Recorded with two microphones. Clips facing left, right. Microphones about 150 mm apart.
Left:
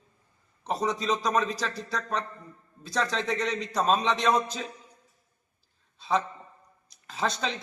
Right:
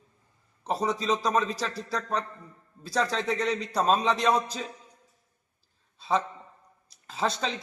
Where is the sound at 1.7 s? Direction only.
30° right (ahead or behind).